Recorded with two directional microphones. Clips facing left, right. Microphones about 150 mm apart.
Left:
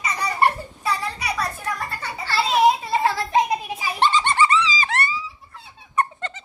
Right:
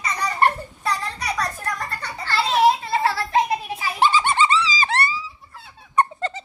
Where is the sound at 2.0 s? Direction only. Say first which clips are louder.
Even; 10° left (ahead or behind).